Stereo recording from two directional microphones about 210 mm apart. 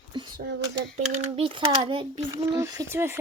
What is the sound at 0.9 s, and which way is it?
A child's voice, 35° right (ahead or behind).